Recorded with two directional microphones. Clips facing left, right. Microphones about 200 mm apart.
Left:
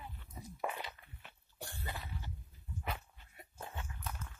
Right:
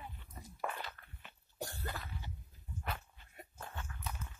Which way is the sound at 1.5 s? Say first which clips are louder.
Right 5 dB; 40° right (ahead or behind).